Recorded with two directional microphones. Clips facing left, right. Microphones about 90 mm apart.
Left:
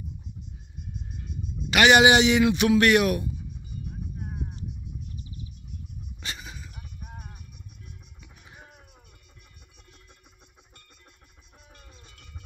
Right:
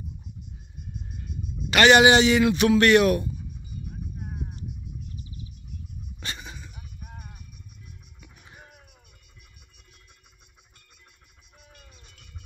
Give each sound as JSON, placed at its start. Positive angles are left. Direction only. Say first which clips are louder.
{"t": 1.3, "sound": "a sound", "louder": "right 1 dB", "side_deg": -50}
{"t": 1.7, "sound": "a man's voice", "louder": "right 1 dB", "side_deg": 10}
{"t": 3.9, "sound": "music", "louder": "even", "side_deg": 0}
{"t": 6.2, "sound": "dog", "louder": "right 1 dB", "side_deg": 5}
{"t": 8.2, "sound": "music", "louder": "even", "side_deg": 5}